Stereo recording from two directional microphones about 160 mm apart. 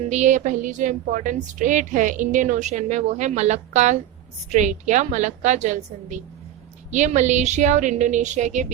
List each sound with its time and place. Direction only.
0.0 s a woman's voice: 50° right (ahead or behind)